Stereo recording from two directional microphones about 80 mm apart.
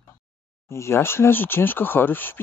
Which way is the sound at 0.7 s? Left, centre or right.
Left.